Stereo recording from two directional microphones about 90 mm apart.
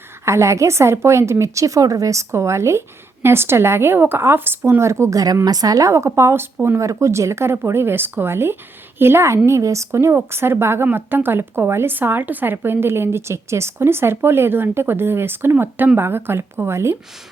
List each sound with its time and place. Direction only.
0.3 s a woman's voice: 35° right (ahead or behind)